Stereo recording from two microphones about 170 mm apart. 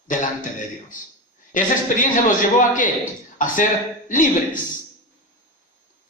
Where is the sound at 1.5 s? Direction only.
50° left (ahead or behind).